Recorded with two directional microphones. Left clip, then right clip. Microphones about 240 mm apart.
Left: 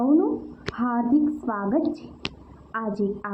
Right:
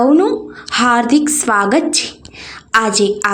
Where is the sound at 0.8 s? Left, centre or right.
Right.